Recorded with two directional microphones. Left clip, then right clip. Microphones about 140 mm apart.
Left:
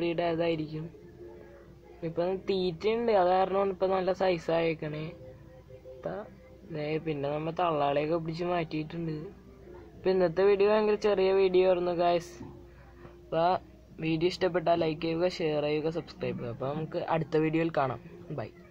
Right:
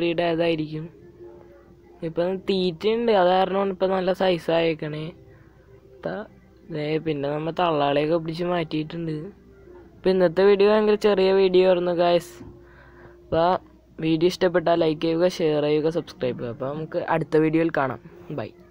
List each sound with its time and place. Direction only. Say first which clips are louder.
0.0 s speech: right 7 dB; 30° right (ahead or behind)
2.0 s a woman's voice: right 6 dB; 30° right (ahead or behind)
5.9 s a sound: right 7 dB; 35° right (ahead or behind)
6.7 s speech: right 7 dB; 30° right (ahead or behind)
13.3 s speech: right 6 dB; 35° right (ahead or behind)